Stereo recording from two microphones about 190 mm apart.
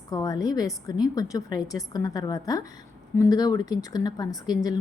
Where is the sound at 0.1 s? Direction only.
20° left (ahead or behind).